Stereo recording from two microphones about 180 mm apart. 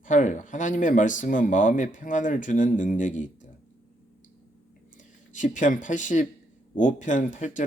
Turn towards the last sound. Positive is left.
turn(degrees=45)  # may be behind; listen again after turning